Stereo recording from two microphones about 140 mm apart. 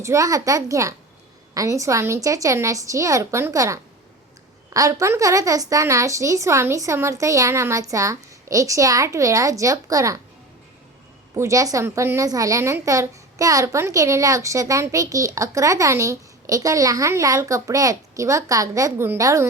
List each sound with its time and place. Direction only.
0.0 s a woman's voice: 20° right (ahead or behind)
11.3 s a woman's voice: 20° right (ahead or behind)